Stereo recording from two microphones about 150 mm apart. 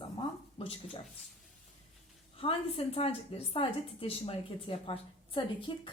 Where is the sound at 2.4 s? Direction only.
40° left (ahead or behind).